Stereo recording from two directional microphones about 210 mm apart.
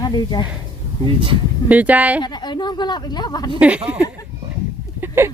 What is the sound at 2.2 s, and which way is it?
Speech, 20° left (ahead or behind).